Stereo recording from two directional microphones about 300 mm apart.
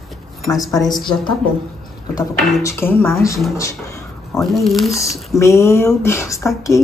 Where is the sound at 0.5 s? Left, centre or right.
Centre.